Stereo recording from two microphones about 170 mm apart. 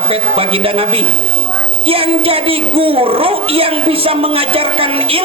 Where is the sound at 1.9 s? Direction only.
35° right (ahead or behind).